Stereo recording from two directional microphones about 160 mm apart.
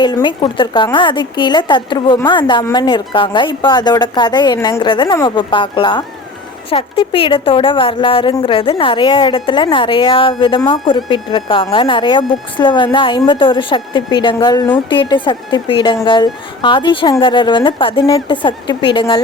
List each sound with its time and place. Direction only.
0.0 s a woman's voice: 30° left (ahead or behind)
18.0 s a woman's voice: 20° left (ahead or behind)
18.4 s a woman's voice: 30° left (ahead or behind)